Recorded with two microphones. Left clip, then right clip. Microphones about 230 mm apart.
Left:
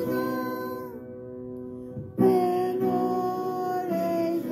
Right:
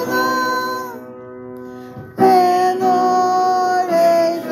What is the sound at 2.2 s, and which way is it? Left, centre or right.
Music, centre.